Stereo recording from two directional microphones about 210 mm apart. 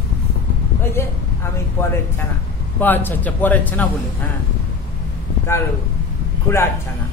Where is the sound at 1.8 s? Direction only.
10° left (ahead or behind).